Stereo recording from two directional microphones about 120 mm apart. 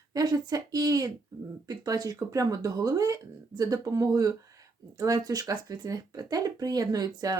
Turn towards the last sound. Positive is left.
turn(degrees=-30)  # may be behind; listen again after turning